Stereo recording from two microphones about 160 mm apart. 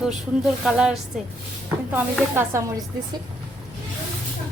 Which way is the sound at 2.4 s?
20° right (ahead or behind).